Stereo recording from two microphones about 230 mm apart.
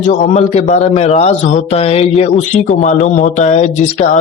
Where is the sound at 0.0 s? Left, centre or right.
Left.